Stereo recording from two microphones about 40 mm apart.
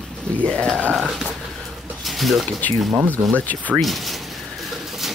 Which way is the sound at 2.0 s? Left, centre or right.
Centre.